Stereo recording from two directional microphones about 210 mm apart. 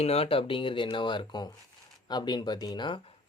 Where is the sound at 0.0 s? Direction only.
30° left (ahead or behind).